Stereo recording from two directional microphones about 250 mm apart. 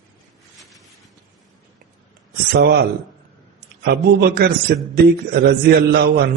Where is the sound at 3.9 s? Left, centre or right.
Right.